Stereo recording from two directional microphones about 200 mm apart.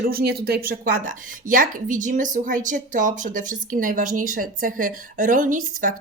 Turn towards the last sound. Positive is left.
turn(degrees=-40)  # may be behind; listen again after turning